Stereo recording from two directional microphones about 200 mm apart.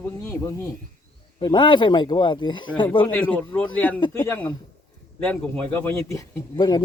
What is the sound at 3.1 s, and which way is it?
Speech, 5° left (ahead or behind).